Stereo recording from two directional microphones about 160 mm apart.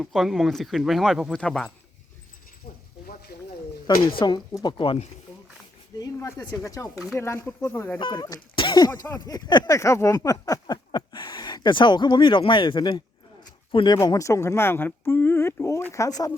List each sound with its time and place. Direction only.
0.0 s speech: centre (ahead or behind)
4.2 s speech: 30° left (ahead or behind)
6.0 s speech: 20° left (ahead or behind)
7.9 s speech: 30° left (ahead or behind)
8.9 s speech: 15° left (ahead or behind)
9.3 s a sound: 25° left (ahead or behind)
13.4 s a woman's voice: 30° left (ahead or behind)